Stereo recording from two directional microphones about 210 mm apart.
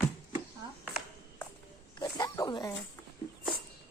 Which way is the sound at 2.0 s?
20° left (ahead or behind).